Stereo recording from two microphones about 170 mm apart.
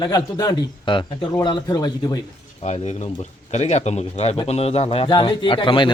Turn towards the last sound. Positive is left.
turn(degrees=30)  # may be behind; listen again after turning